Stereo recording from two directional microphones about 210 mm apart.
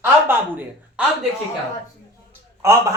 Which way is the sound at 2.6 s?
10° right (ahead or behind).